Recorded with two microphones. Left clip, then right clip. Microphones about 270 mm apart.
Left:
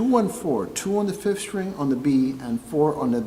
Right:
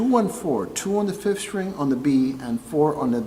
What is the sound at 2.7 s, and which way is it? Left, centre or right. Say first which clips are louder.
Speech: right 1 dB; centre.